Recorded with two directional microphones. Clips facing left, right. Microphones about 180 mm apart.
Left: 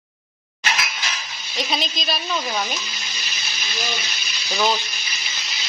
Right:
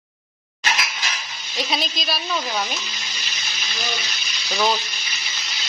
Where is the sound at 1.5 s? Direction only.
Centre (ahead or behind).